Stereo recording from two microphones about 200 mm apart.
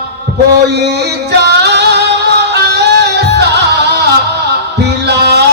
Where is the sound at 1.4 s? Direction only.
55° right (ahead or behind).